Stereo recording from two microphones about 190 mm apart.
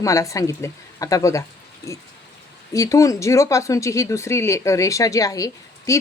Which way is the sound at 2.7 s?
15° left (ahead or behind).